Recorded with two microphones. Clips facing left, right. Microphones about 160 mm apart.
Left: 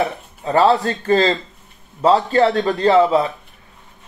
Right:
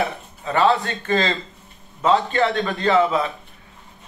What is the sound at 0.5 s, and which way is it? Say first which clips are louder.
Speech: left 4 dB; 35° left (ahead or behind).